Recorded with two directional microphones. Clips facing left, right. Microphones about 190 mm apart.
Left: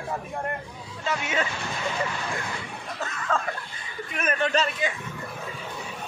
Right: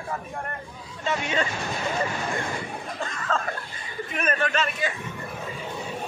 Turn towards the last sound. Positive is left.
turn(degrees=30)  # may be behind; listen again after turning